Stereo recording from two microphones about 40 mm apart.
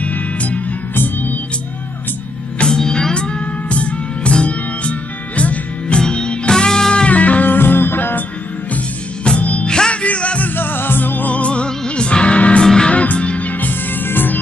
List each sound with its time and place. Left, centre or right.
0.0 s music: left
0.9 s music: left
2.8 s music: centre
7.1 s music: left
7.4 s music: left
9.4 s music: left
9.7 s music: left
10.0 s music: left
10.4 s music: left
11.3 s music: left
12.6 s music: centre
12.9 s music: left